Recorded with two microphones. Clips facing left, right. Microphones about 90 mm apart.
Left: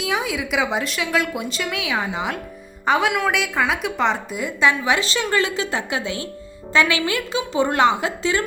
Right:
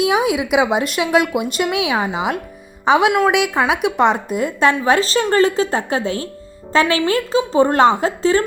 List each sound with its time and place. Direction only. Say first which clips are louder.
0.0 s a woman's voice: right 7 dB; 60° right (ahead or behind); by 8.4 s 40° right (ahead or behind)